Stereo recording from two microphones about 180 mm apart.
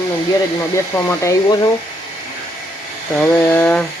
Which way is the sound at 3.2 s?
10° left (ahead or behind).